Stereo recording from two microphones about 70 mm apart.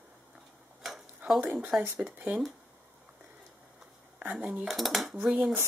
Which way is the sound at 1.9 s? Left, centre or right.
Right.